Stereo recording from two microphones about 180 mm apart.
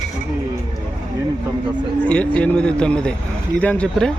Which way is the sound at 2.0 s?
5° left (ahead or behind).